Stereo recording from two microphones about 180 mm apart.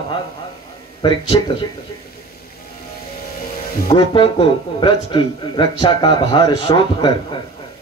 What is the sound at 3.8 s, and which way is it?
A man's voice, 25° left (ahead or behind).